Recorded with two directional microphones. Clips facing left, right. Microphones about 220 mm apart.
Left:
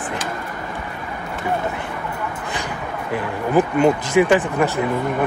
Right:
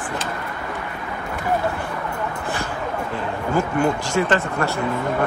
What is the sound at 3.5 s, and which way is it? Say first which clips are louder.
Speech: left 5 dB; 20° left (ahead or behind).